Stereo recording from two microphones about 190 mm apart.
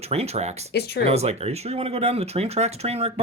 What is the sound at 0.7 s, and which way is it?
Speech, 60° left (ahead or behind).